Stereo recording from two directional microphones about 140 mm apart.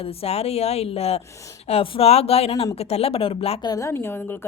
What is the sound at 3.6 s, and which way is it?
Speech, 25° left (ahead or behind).